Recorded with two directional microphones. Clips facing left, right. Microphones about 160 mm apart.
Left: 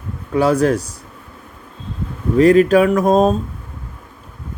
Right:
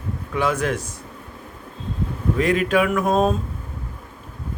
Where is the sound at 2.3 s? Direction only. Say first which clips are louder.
Left 9 dB; 40° left (ahead or behind).